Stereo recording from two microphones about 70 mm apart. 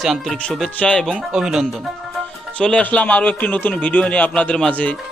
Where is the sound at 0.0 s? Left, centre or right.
Centre.